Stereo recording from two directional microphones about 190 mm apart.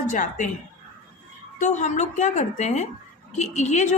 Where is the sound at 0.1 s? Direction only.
40° left (ahead or behind).